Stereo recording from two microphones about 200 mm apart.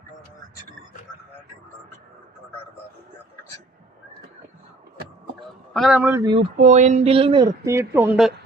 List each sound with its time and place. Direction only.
5.7 s a man's voice: centre (ahead or behind)
6.6 s speech: 35° right (ahead or behind); by 8.3 s 5° right (ahead or behind)